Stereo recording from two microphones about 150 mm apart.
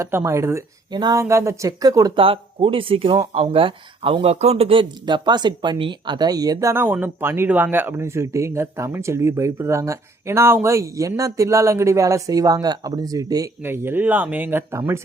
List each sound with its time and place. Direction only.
0.0 s speech: 15° right (ahead or behind)
2.1 s speech: 40° right (ahead or behind); by 15.0 s 20° right (ahead or behind)